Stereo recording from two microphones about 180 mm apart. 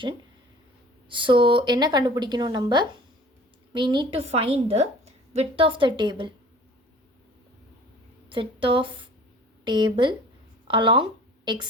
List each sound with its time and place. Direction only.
1.1 s a woman's voice: 25° right (ahead or behind)
8.3 s speech: 30° right (ahead or behind)